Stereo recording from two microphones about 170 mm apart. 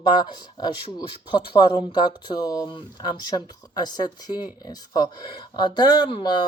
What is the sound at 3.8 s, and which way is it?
Speech, 25° left (ahead or behind).